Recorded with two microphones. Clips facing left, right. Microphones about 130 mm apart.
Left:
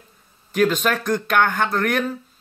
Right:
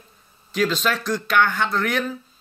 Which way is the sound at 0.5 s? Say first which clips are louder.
Left 3 dB; 55° left (ahead or behind).